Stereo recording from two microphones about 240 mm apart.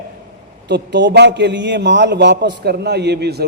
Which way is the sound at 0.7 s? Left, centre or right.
Right.